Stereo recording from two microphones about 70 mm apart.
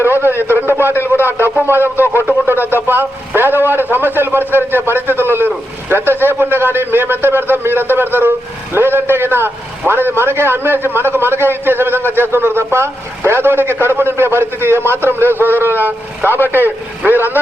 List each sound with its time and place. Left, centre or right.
0.0 s a man's voice: right